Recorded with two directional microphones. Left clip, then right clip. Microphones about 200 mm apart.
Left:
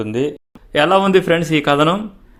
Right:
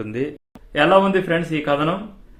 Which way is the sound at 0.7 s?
50° left (ahead or behind).